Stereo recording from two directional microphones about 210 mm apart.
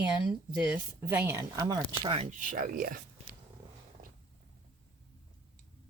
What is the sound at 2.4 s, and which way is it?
Speech, 40° right (ahead or behind).